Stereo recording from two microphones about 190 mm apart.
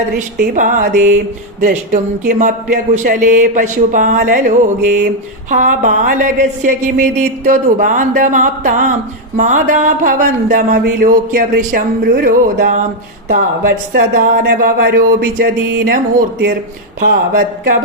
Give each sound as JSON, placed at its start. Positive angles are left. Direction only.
{"t": 0.3, "sound": "speech", "side_deg": -45}
{"t": 13.9, "sound": "speech", "side_deg": -50}